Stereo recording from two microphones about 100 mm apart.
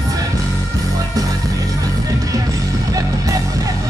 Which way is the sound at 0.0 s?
35° right (ahead or behind).